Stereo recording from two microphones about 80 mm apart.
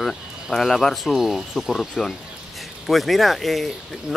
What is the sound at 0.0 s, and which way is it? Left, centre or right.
Speech, centre.